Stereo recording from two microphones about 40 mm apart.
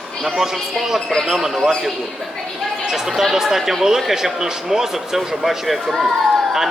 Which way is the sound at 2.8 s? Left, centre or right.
Centre.